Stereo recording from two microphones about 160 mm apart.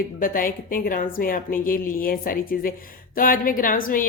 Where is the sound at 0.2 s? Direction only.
60° left (ahead or behind).